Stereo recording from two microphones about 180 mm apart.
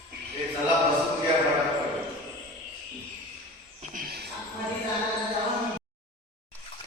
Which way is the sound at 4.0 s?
60° right (ahead or behind).